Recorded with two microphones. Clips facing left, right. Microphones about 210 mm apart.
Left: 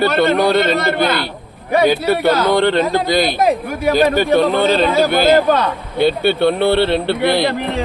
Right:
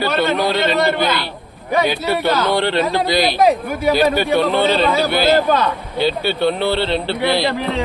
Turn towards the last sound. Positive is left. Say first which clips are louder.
# left 2 dB
turn(degrees=55)  # may be behind; listen again after turning